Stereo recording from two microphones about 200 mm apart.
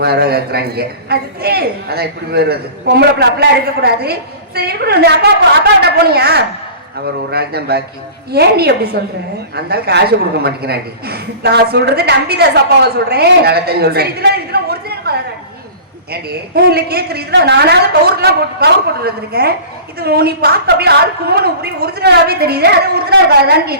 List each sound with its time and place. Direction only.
0.0 s a woman's voice: 50° right (ahead or behind)
16.6 s a woman's voice: 50° right (ahead or behind)